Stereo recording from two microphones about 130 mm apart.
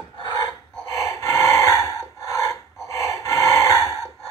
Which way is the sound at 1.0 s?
20° left (ahead or behind).